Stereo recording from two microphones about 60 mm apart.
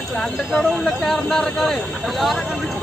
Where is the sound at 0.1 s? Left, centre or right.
Centre.